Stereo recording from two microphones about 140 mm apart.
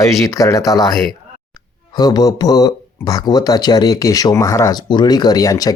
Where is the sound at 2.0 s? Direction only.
30° left (ahead or behind).